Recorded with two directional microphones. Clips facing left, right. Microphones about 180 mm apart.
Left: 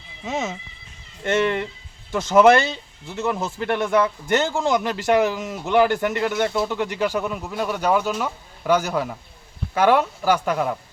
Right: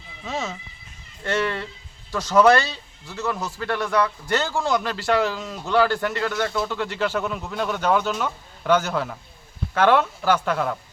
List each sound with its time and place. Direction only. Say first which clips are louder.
0.3 s speech: left 3 dB; 20° left (ahead or behind)